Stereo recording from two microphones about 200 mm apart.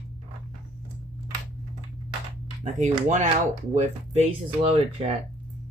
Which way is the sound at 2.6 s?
35° right (ahead or behind).